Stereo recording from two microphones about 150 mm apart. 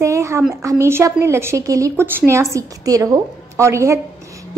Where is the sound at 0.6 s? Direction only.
20° right (ahead or behind).